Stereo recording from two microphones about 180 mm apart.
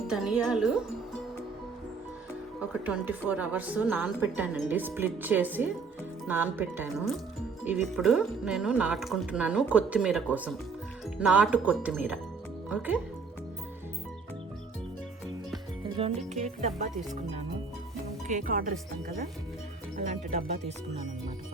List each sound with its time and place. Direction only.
0.1 s speech: 5° right (ahead or behind)
2.8 s a woman's voice: 10° right (ahead or behind)
16.0 s speech: 35° right (ahead or behind)
18.3 s speech: 45° right (ahead or behind)
20.0 s speech: 40° right (ahead or behind)